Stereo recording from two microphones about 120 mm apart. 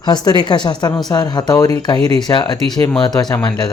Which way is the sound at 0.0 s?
35° left (ahead or behind).